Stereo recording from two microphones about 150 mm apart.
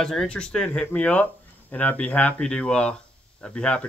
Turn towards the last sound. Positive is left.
turn(degrees=5)  # may be behind; listen again after turning